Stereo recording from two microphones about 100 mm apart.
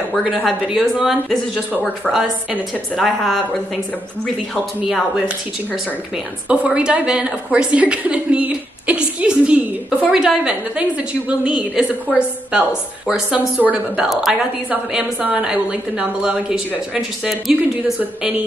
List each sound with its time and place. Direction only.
0.7 s speech: centre (ahead or behind)
4.8 s speech: centre (ahead or behind)
6.5 s a sound: 10° right (ahead or behind)
10.1 s a woman's voice: 5° right (ahead or behind)
14.0 s a woman's voice: centre (ahead or behind)